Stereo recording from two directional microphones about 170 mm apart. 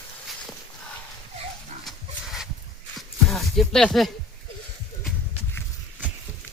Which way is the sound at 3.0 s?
Centre (ahead or behind).